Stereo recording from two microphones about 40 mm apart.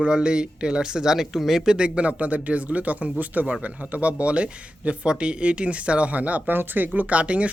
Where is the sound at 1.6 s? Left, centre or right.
Right.